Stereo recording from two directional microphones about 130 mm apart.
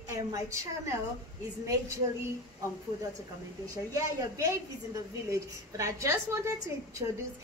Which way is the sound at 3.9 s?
25° right (ahead or behind).